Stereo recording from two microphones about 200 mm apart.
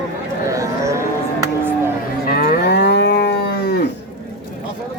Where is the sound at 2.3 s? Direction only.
55° left (ahead or behind).